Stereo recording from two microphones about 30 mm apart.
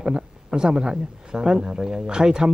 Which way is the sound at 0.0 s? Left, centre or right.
Right.